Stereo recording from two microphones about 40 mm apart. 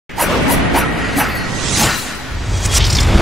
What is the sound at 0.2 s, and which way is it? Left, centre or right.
Music, centre.